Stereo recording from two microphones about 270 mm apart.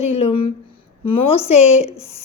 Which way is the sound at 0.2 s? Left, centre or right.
Left.